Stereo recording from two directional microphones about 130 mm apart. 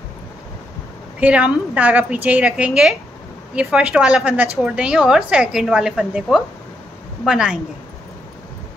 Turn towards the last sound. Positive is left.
turn(degrees=-5)  # may be behind; listen again after turning